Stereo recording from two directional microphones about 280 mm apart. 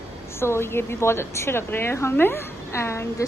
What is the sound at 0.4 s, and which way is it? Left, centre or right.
A woman's voice, centre.